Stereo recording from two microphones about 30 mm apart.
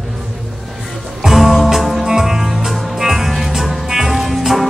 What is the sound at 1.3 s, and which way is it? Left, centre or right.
Music, centre.